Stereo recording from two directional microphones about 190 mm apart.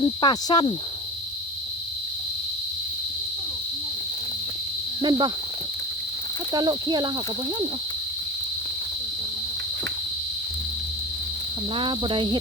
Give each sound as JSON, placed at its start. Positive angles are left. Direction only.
{"t": 0.0, "sound": "cricket", "side_deg": 25}
{"t": 5.0, "sound": "cricket", "side_deg": -25}
{"t": 6.5, "sound": "cricket", "side_deg": -20}
{"t": 11.7, "sound": "cricket", "side_deg": -25}